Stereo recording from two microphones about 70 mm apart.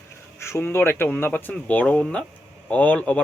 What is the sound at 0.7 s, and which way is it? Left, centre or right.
Speech, left.